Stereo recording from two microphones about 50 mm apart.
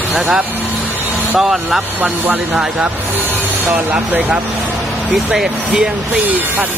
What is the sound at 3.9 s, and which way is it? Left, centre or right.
Speech, right.